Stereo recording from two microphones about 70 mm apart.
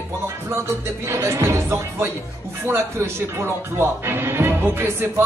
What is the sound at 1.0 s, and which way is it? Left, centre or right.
Speech, right.